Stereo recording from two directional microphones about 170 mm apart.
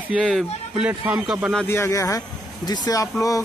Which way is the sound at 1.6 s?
15° left (ahead or behind).